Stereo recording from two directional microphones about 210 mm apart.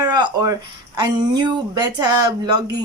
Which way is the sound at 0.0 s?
20° right (ahead or behind).